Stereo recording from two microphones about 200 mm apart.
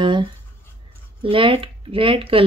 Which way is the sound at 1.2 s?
25° right (ahead or behind).